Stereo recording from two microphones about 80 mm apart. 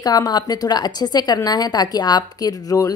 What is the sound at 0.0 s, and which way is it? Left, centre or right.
A woman's voice, left.